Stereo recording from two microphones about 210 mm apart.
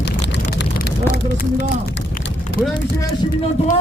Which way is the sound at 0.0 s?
55° left (ahead or behind).